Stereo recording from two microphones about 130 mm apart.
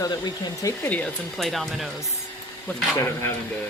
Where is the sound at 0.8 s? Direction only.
10° left (ahead or behind).